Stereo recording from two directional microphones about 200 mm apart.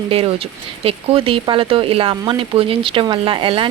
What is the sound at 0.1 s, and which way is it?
Speech, 25° right (ahead or behind).